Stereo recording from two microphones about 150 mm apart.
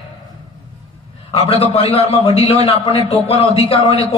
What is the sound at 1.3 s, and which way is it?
A man's voice, 45° left (ahead or behind).